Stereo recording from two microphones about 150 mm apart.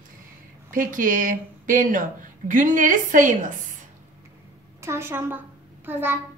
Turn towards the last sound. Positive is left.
turn(degrees=-15)  # may be behind; listen again after turning